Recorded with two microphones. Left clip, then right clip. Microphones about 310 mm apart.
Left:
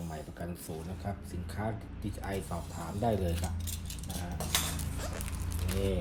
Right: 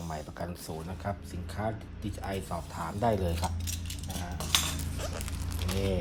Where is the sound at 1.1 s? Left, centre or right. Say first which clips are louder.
Right 6 dB; centre.